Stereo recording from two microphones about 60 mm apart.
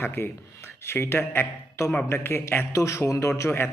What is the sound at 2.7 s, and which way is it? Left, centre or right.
Speech, left.